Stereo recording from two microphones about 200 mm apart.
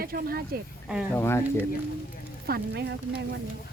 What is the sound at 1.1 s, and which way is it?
Speech, 10° left (ahead or behind).